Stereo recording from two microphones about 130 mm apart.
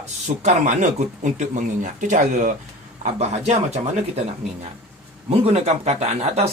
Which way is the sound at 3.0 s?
55° right (ahead or behind).